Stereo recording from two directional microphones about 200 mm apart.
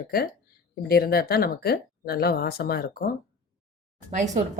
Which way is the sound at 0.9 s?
50° left (ahead or behind).